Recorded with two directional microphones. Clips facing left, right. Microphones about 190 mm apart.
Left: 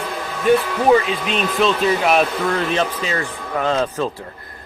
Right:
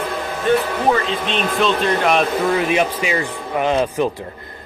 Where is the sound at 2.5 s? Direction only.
10° right (ahead or behind).